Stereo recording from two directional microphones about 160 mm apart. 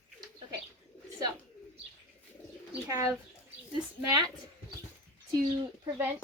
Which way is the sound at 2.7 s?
20° right (ahead or behind).